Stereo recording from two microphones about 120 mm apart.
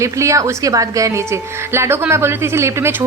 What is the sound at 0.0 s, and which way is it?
Speech, 25° right (ahead or behind).